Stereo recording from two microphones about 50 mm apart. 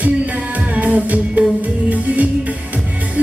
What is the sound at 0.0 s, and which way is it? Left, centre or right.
Music, right.